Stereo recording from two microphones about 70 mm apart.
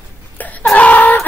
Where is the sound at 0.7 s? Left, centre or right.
Left.